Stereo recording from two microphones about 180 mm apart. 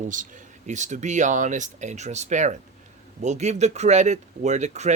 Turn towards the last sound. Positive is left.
turn(degrees=-40)  # may be behind; listen again after turning